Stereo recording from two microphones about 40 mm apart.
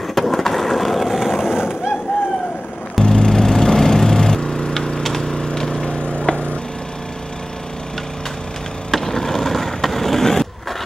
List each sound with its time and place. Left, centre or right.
0.1 s skateboard: centre
1.5 s fireworks: centre
3.0 s music: centre
4.4 s a sound: centre
5.9 s a sound: left
8.9 s skateboard: centre